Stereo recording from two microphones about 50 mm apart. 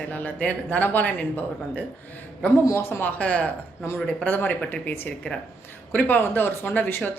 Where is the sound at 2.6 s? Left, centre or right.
Left.